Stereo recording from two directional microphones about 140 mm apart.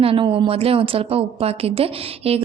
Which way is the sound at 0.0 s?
40° right (ahead or behind).